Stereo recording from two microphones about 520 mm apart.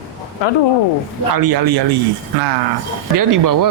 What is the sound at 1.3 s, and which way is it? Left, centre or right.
Speech, right.